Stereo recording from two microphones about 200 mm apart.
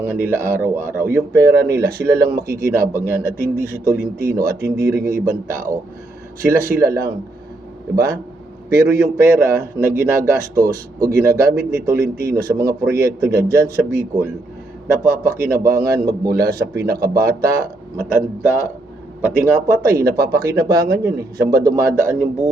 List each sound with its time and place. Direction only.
0.0 s a man's voice: 10° right (ahead or behind)
8.7 s a man's voice: 15° right (ahead or behind)
19.2 s a man's voice: 10° right (ahead or behind)